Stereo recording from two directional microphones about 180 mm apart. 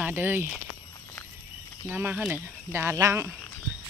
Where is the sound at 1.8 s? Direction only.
10° right (ahead or behind).